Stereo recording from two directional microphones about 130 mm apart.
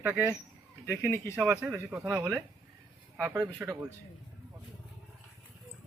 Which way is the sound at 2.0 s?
25° right (ahead or behind).